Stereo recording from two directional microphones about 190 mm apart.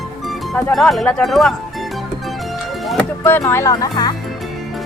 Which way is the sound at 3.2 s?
10° left (ahead or behind).